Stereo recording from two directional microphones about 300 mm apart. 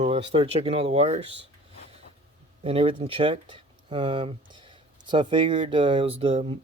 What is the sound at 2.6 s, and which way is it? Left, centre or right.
Speech, centre.